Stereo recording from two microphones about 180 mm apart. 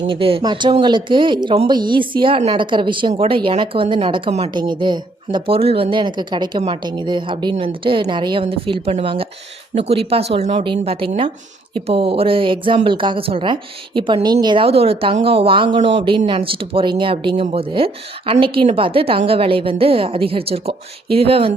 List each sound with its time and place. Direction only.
0.1 s a woman's voice: 30° right (ahead or behind)